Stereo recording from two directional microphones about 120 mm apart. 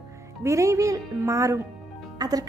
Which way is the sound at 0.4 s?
25° right (ahead or behind).